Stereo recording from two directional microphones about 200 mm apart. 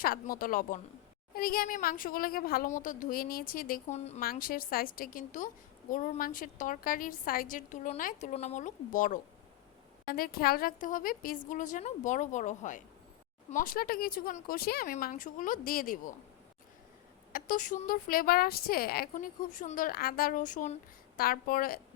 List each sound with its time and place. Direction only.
0.0 s speech: 45° left (ahead or behind)
4.2 s a woman's voice: 45° left (ahead or behind)
10.2 s a woman's voice: 50° left (ahead or behind)
17.3 s speech: 40° left (ahead or behind)